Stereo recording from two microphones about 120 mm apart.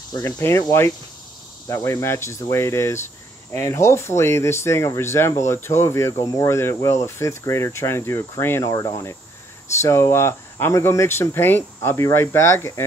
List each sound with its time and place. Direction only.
0.1 s speech: 20° left (ahead or behind)